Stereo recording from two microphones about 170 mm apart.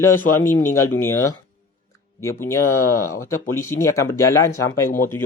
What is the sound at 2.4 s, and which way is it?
Speech, 15° left (ahead or behind).